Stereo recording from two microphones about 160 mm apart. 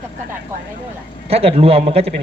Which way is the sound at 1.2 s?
40° right (ahead or behind).